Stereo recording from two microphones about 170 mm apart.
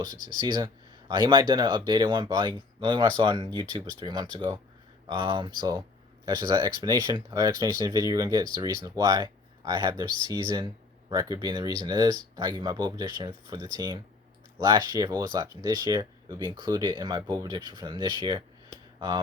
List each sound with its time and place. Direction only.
0.4 s speech: 25° right (ahead or behind)